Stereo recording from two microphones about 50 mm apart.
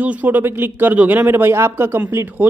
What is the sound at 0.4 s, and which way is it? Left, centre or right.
Speech, right.